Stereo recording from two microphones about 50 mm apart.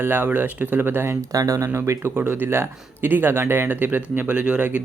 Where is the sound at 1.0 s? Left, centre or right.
Right.